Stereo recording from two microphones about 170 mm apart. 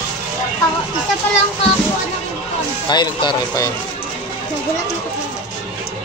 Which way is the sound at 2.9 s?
25° left (ahead or behind).